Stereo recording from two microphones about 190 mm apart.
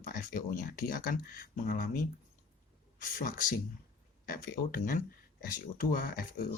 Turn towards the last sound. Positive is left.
turn(degrees=50)  # may be behind; listen again after turning